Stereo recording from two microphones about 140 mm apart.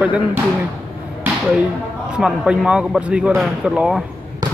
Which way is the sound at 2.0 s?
5° right (ahead or behind).